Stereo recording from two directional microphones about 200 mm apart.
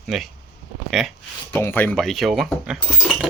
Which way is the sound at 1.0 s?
Centre (ahead or behind).